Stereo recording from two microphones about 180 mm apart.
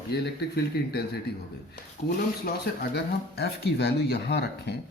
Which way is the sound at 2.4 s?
60° left (ahead or behind).